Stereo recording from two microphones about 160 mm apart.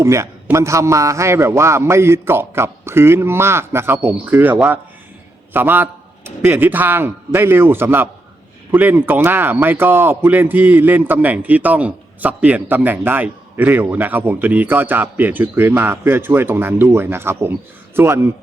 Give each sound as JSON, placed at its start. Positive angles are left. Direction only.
{"t": 0.0, "sound": "a man's voice", "side_deg": -15}